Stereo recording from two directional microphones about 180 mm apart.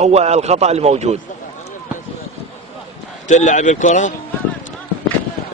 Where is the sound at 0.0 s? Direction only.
35° right (ahead or behind).